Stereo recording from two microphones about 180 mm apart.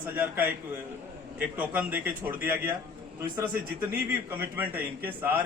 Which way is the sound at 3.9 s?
10° right (ahead or behind).